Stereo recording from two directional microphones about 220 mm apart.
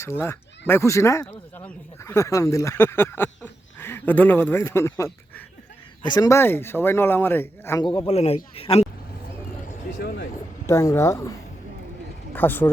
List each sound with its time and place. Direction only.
0.0 s speech: 10° left (ahead or behind)
7.9 s speech: 25° left (ahead or behind)
10.0 s vehicle: 45° left (ahead or behind)
10.7 s speech: 15° left (ahead or behind)